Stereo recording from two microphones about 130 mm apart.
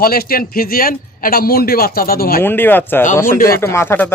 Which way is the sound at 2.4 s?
15° left (ahead or behind).